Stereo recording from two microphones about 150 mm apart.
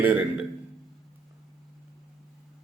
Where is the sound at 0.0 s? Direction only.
10° right (ahead or behind).